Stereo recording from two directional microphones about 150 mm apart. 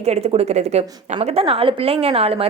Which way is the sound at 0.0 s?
45° right (ahead or behind).